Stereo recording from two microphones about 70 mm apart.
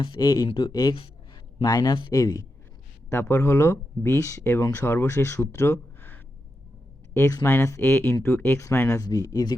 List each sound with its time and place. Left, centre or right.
0.1 s speech: left
2.1 s speech: left
3.1 s speech: left
4.7 s speech: left
7.1 s speech: left
8.5 s speech: left
8.9 s speech: left